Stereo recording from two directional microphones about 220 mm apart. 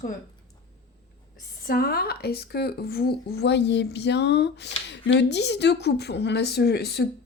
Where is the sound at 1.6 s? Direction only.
45° left (ahead or behind).